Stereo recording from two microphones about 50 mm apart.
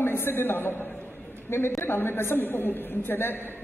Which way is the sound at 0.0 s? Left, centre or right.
Left.